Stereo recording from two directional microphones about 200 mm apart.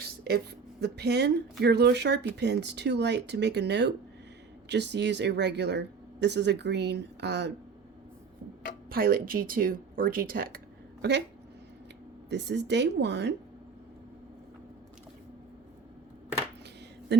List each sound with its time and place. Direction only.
0.0 s speech: 50° right (ahead or behind)
8.9 s speech: 45° right (ahead or behind)
12.3 s speech: 60° right (ahead or behind)
17.1 s speech: 60° right (ahead or behind)